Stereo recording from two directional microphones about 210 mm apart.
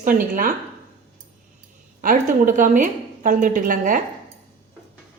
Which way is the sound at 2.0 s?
40° right (ahead or behind).